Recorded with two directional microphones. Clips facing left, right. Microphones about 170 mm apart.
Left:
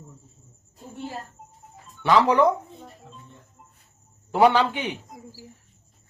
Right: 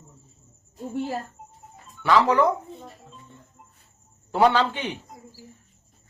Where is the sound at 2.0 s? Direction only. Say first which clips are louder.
Left 1 dB; 20° left (ahead or behind).